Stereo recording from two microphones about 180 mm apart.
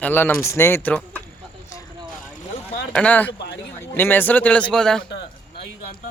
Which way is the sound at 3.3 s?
70° left (ahead or behind).